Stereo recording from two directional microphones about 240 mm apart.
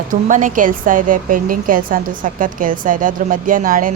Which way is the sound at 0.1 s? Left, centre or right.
Right.